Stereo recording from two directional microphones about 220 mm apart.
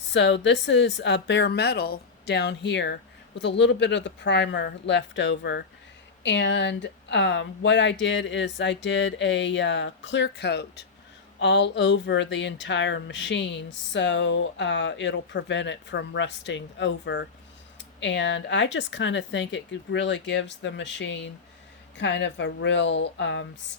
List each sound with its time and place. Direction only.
0.1 s speech: 55° left (ahead or behind)